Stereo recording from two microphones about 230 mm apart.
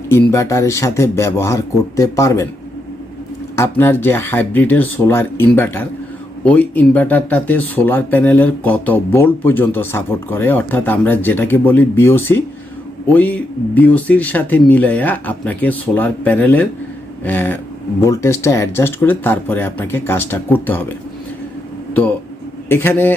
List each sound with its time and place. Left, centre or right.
0.1 s speech: centre
3.5 s speech: centre
22.7 s speech: centre